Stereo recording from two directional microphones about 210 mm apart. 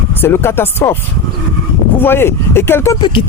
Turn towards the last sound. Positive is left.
turn(degrees=25)  # may be behind; listen again after turning